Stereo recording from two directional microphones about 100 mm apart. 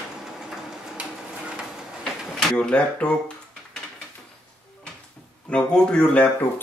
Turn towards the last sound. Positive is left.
turn(degrees=10)  # may be behind; listen again after turning